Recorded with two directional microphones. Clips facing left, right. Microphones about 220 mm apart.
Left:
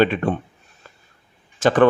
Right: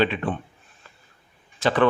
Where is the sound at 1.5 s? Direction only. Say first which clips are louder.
Left 5 dB; 45° left (ahead or behind).